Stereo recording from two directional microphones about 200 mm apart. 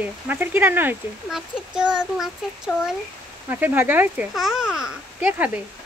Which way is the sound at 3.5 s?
10° right (ahead or behind).